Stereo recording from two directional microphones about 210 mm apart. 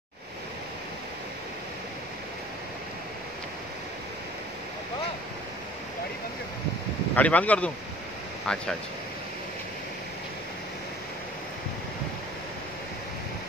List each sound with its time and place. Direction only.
7.2 s speech: 5° left (ahead or behind)